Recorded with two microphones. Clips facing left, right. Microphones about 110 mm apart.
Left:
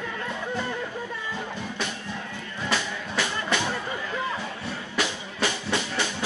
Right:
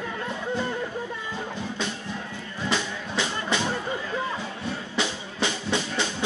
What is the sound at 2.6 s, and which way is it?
Music, 25° right (ahead or behind).